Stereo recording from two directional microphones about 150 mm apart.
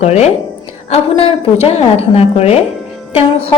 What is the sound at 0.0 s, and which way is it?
A woman's voice, 45° left (ahead or behind).